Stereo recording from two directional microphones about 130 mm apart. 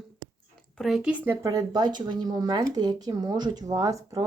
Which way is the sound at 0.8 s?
Centre (ahead or behind).